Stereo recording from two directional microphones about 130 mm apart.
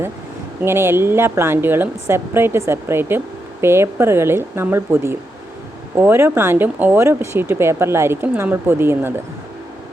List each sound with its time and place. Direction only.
0.6 s speech: 20° right (ahead or behind)